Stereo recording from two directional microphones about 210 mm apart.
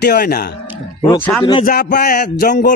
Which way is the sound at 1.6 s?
45° left (ahead or behind).